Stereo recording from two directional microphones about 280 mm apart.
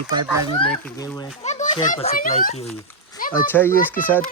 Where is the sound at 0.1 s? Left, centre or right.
Centre.